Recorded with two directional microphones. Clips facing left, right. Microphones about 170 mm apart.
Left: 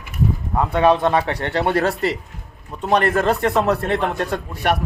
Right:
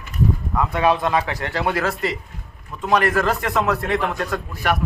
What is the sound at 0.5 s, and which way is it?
A man's voice, 30° left (ahead or behind).